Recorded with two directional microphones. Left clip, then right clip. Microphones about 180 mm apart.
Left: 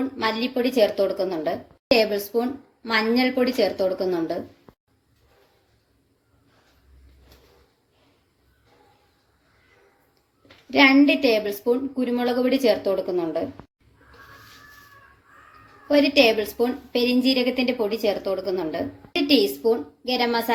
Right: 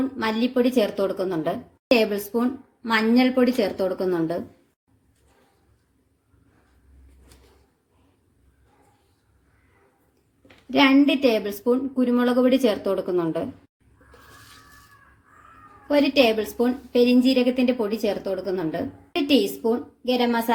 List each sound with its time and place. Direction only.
0.2 s a woman's voice: 50° right (ahead or behind)
10.7 s a woman's voice: 50° right (ahead or behind)
15.9 s a woman's voice: 45° right (ahead or behind)